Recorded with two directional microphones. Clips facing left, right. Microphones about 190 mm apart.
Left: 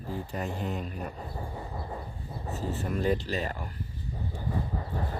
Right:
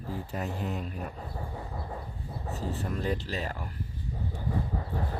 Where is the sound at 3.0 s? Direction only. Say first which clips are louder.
Left 7 dB; centre (ahead or behind).